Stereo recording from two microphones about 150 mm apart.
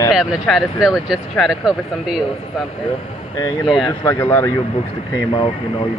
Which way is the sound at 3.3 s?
25° left (ahead or behind).